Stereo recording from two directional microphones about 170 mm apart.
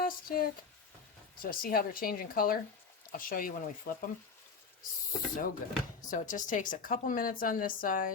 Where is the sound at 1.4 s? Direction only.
55° left (ahead or behind).